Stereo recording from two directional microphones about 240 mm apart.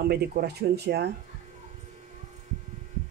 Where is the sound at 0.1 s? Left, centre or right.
Right.